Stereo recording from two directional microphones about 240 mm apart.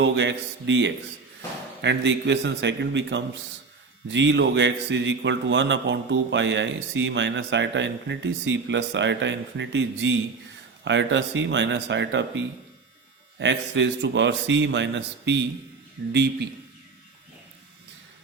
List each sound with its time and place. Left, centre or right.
0.0 s speech: right